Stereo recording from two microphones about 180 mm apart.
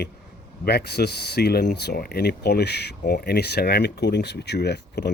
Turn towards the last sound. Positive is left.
turn(degrees=70)  # may be behind; listen again after turning